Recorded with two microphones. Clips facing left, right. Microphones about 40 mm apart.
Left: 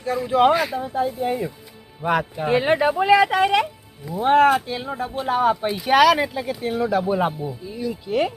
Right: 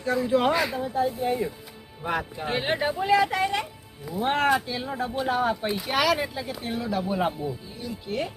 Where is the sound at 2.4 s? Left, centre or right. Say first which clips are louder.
Left 8 dB; left.